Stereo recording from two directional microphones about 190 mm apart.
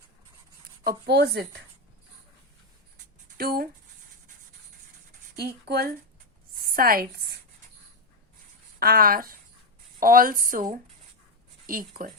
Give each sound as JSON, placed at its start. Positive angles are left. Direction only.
{"t": 0.9, "sound": "speech", "side_deg": -60}
{"t": 3.3, "sound": "speech", "side_deg": -50}
{"t": 5.4, "sound": "a woman's voice", "side_deg": -55}
{"t": 8.8, "sound": "speech", "side_deg": -50}